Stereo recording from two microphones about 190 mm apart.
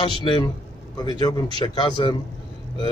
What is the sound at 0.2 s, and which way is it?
Speech, 25° left (ahead or behind).